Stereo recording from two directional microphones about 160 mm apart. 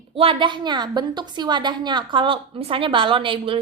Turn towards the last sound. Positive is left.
turn(degrees=-35)  # may be behind; listen again after turning